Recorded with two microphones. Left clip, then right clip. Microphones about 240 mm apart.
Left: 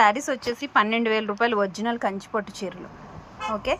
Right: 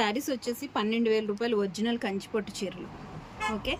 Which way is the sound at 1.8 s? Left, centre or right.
Left.